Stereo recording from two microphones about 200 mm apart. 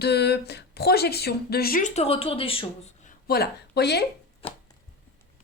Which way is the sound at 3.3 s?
55° left (ahead or behind).